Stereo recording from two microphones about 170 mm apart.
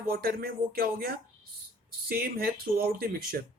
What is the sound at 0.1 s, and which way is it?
Speech, 60° right (ahead or behind).